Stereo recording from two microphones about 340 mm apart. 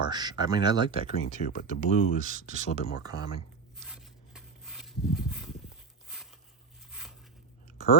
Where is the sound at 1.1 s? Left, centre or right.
Left.